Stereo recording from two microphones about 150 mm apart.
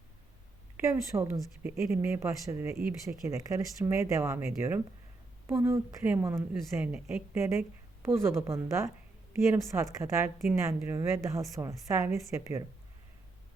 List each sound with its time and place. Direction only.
0.8 s speech: 20° right (ahead or behind)